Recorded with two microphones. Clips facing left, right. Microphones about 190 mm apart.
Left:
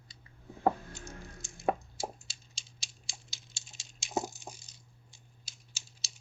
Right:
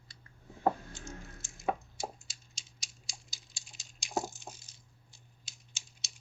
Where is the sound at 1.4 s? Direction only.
Centre (ahead or behind).